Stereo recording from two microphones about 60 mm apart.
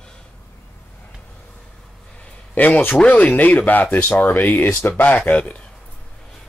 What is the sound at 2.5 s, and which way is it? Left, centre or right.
Speech, left.